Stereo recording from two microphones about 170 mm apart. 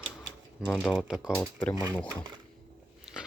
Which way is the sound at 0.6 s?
5° right (ahead or behind).